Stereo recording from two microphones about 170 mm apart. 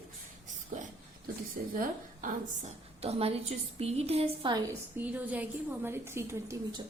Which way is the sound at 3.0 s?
35° right (ahead or behind).